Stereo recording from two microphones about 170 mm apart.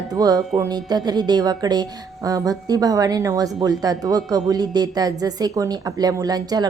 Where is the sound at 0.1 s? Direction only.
20° right (ahead or behind).